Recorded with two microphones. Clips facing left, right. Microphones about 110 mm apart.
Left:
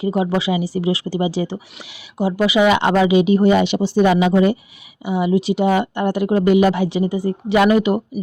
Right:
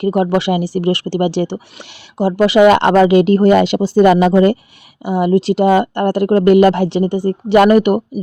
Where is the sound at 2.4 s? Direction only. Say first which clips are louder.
Right 6 dB; 75° right (ahead or behind).